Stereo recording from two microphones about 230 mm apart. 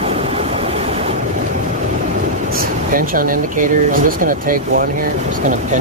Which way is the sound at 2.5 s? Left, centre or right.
Right.